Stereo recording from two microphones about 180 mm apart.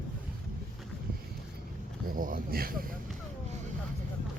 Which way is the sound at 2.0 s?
50° right (ahead or behind).